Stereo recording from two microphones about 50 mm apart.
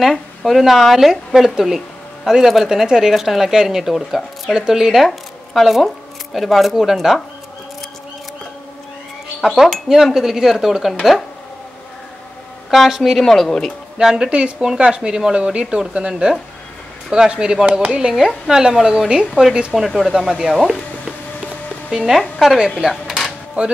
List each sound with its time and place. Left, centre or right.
0.0 s a woman's voice: centre
4.9 s speech: centre
9.4 s speech: centre
12.7 s speech: centre
13.2 s speech: centre
13.9 s speech: centre
21.9 s speech: centre
22.8 s a sound: centre
23.6 s speech: right